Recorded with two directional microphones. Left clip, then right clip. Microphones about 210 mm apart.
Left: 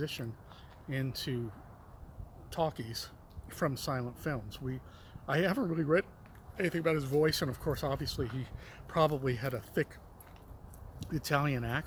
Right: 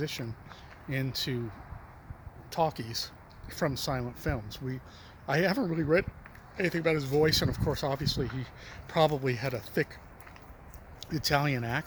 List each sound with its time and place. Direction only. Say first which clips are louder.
0.0 s speech: right 3 dB; 5° right (ahead or behind)
2.5 s speech: right 5 dB; 10° right (ahead or behind)
11.1 s speech: right 4 dB; 5° right (ahead or behind)